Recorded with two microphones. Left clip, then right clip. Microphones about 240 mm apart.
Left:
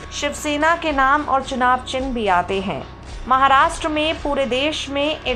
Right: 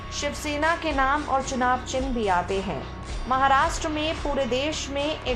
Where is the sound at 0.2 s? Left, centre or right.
Centre.